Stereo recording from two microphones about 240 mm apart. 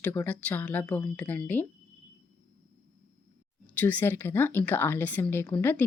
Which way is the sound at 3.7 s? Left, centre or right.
Centre.